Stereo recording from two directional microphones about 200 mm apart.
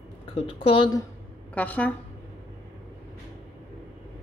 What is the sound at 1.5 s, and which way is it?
Speech, 5° left (ahead or behind).